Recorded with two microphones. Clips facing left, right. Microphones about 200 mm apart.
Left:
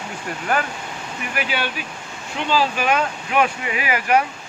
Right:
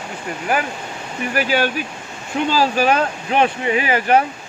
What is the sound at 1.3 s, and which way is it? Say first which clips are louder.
Speech: right 7 dB; 40° right (ahead or behind).